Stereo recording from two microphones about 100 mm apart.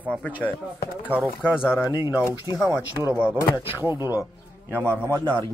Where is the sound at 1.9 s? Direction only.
20° right (ahead or behind).